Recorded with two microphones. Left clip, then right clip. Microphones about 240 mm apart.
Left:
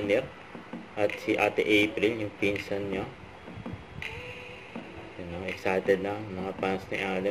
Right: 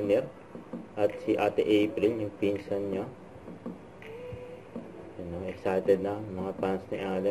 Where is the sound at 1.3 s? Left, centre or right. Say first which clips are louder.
Left 2 dB; left.